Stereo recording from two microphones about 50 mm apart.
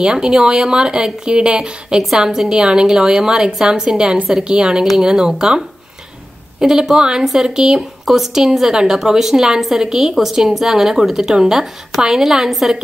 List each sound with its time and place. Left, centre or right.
0.0 s speech: centre
6.6 s speech: centre